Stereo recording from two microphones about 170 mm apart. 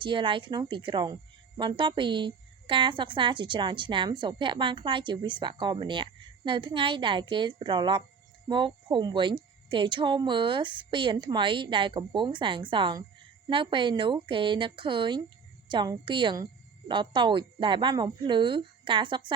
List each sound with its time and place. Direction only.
0.0 s speech: 30° right (ahead or behind)